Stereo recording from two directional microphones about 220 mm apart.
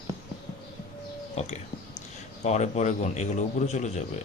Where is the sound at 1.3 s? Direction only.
30° left (ahead or behind).